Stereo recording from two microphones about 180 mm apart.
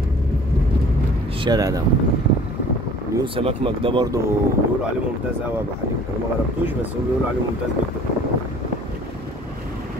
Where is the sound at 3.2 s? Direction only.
30° right (ahead or behind).